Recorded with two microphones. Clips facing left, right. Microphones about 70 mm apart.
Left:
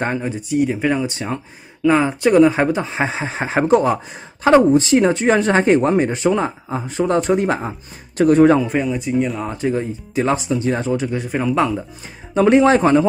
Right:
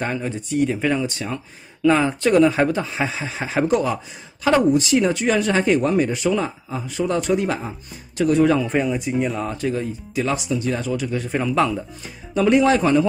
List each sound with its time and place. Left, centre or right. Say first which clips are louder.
0.2 s speech: left 3 dB; centre; by 1.4 s left
1.8 s speech: left 2 dB; centre; by 8.5 s left
8.6 s speech: left 1 dB; centre
9.5 s speech: left 3 dB; left
11.2 s speech: left 1 dB; centre
12.4 s speech: left 4 dB; left